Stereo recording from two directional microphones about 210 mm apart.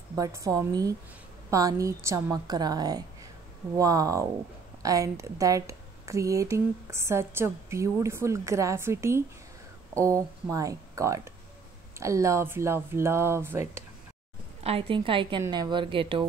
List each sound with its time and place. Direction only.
0.1 s speech: 15° right (ahead or behind)
14.6 s a woman's voice: 25° right (ahead or behind)